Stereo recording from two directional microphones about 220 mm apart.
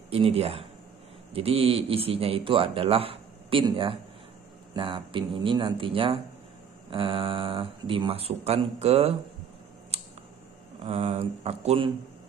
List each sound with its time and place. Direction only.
0.1 s a man's voice: 25° right (ahead or behind)
9.9 s a sound: 30° right (ahead or behind)
10.8 s a man's voice: 25° right (ahead or behind)